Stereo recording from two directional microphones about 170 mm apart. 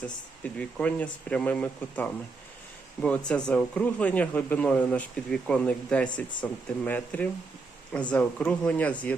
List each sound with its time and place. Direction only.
0.6 s speech: 5° left (ahead or behind)